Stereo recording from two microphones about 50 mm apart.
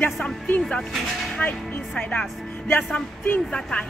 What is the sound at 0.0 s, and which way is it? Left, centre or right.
Speech, left.